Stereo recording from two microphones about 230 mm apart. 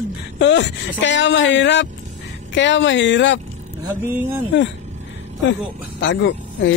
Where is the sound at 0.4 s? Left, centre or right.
Left.